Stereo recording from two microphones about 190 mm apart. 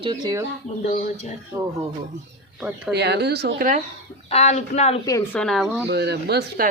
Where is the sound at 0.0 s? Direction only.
20° right (ahead or behind).